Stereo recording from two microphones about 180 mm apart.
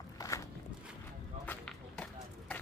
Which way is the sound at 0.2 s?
20° left (ahead or behind).